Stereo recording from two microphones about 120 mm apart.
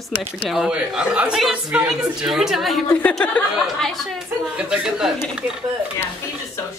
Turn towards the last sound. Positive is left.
turn(degrees=-5)  # may be behind; listen again after turning